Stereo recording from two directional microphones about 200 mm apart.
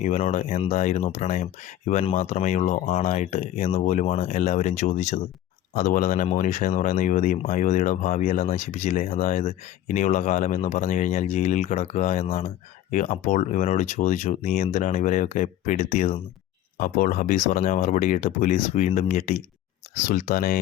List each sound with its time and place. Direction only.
0.0 s speech: 35° left (ahead or behind)